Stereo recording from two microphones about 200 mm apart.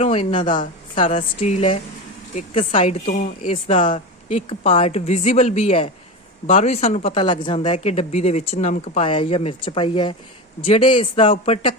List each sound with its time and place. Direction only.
0.0 s speech: 30° left (ahead or behind)